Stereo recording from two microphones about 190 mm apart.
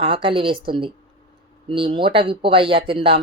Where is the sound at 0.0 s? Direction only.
30° right (ahead or behind).